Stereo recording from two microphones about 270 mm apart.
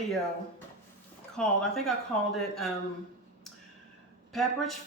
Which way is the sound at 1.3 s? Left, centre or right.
Centre.